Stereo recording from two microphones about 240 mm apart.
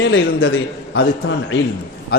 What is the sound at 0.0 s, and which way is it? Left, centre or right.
A man's voice, left.